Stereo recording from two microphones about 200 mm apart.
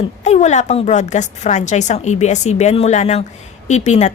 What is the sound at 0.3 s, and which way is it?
A woman's voice, 35° left (ahead or behind).